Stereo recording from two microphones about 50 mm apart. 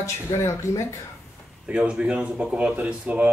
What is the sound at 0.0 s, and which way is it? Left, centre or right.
Speech, left.